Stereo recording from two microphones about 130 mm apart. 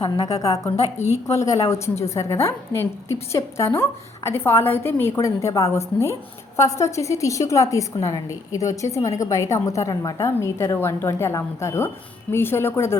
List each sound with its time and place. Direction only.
0.3 s a woman's voice: 25° left (ahead or behind)